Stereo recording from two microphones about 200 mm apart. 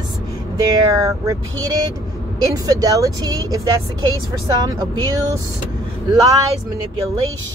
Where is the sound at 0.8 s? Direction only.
15° right (ahead or behind).